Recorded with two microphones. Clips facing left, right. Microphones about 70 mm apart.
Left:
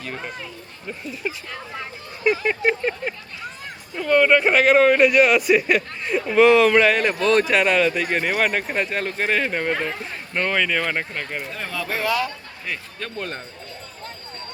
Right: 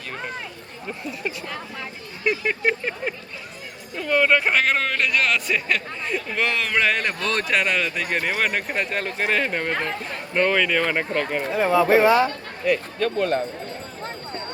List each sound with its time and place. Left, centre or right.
0.9 s speech: centre
11.5 s speech: right
12.6 s speech: centre